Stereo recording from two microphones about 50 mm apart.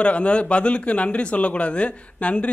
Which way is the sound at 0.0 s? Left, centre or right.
Left.